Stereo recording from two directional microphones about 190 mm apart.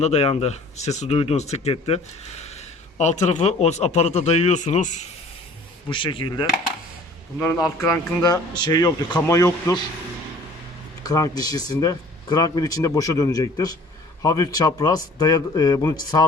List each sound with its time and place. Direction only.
0.0 s a man's voice: 35° left (ahead or behind)
5.9 s speech: 25° left (ahead or behind)
7.3 s a man's voice: 5° left (ahead or behind)
7.8 s speech: 15° left (ahead or behind)
11.0 s speech: 20° left (ahead or behind)